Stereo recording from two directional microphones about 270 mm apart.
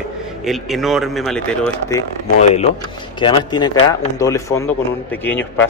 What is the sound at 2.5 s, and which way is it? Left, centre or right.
Speech, left.